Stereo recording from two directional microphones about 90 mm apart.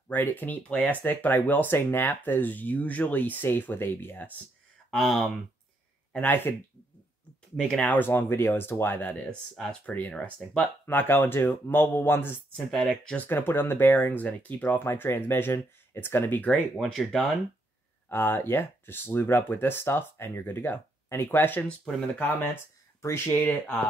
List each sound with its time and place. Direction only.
0.1 s speech: 20° left (ahead or behind)
4.9 s speech: 5° left (ahead or behind)
6.1 s speech: 20° left (ahead or behind)
7.6 s speech: 5° left (ahead or behind)
7.9 s speech: 25° left (ahead or behind)
12.5 s speech: 5° left (ahead or behind)
16.8 s speech: 5° left (ahead or behind)
18.0 s speech: 25° left (ahead or behind)
21.6 s speech: 10° left (ahead or behind)
23.0 s speech: 30° left (ahead or behind)